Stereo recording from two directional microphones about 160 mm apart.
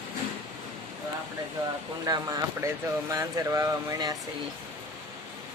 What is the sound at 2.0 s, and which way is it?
Speech, 25° right (ahead or behind).